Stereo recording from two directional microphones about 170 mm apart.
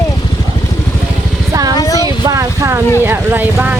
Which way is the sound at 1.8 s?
20° left (ahead or behind).